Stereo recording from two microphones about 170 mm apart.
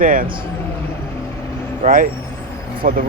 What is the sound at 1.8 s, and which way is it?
Speech, 55° right (ahead or behind).